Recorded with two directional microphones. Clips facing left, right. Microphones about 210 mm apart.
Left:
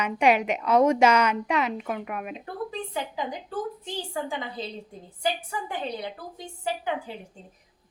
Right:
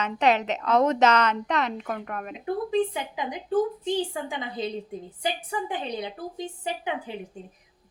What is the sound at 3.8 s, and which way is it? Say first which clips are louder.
A woman's voice: right 5 dB; 20° right (ahead or behind).